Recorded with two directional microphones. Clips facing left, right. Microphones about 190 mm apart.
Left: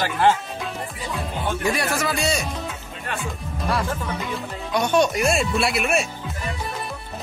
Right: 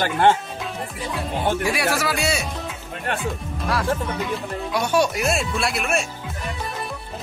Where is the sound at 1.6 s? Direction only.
5° right (ahead or behind).